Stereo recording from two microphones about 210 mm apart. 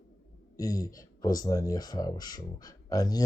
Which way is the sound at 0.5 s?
15° left (ahead or behind).